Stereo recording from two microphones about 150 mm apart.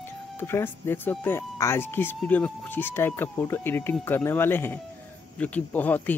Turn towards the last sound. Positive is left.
turn(degrees=10)  # may be behind; listen again after turning